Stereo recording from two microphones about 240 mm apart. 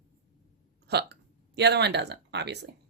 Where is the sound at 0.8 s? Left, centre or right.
Right.